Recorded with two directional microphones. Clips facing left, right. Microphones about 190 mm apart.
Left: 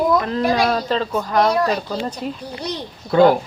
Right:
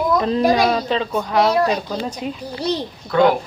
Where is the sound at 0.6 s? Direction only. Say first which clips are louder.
Right 1 dB; centre (ahead or behind).